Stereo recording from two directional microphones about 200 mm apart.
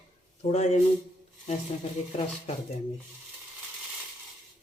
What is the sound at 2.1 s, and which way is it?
Speech, 30° left (ahead or behind).